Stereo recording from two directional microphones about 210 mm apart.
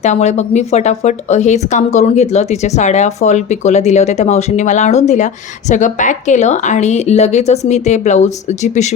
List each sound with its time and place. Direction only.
0.0 s a woman's voice: 35° left (ahead or behind)